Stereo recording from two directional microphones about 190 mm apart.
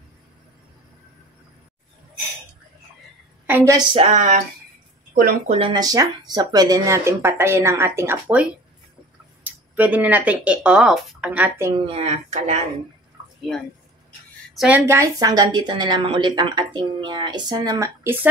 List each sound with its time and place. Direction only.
3.4 s a woman's voice: 10° right (ahead or behind)
3.7 s speech: 30° right (ahead or behind)
5.5 s speech: 25° right (ahead or behind); by 11.7 s 10° right (ahead or behind)
11.8 s speech: 30° right (ahead or behind)
14.6 s a woman's voice: 10° right (ahead or behind)